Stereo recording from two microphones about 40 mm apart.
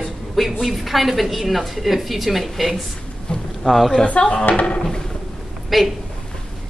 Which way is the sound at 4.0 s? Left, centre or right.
Left.